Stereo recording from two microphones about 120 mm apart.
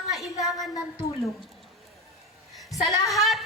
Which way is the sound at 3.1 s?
Centre (ahead or behind).